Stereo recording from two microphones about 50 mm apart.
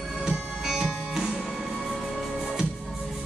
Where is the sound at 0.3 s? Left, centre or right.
Centre.